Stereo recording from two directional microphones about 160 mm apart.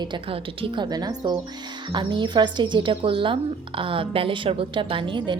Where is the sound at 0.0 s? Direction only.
30° right (ahead or behind).